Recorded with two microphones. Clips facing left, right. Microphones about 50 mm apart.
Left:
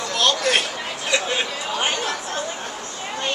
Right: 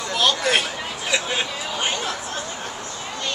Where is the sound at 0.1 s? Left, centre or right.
Centre.